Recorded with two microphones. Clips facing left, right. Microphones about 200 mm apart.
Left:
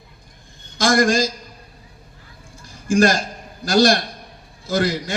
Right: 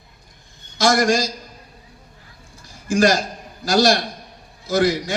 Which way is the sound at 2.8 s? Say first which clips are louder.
Left 1 dB; 50° left (ahead or behind).